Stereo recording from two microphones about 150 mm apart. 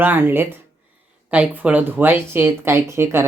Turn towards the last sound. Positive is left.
turn(degrees=-15)  # may be behind; listen again after turning